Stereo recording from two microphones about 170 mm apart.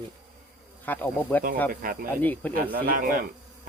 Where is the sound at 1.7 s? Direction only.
60° right (ahead or behind).